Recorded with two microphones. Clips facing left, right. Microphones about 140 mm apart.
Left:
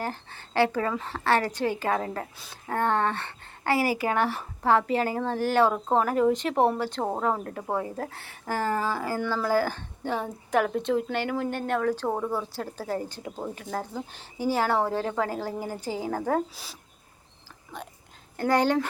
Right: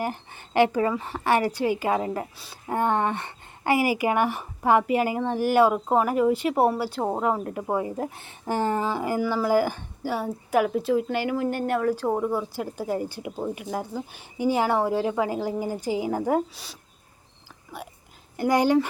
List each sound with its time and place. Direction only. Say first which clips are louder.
0.0 s a woman's voice: right 3 dB; 15° right (ahead or behind)
16.6 s a woman's voice: right 1 dB; centre (ahead or behind)